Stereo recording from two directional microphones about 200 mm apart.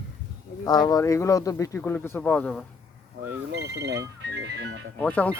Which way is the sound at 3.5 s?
55° right (ahead or behind).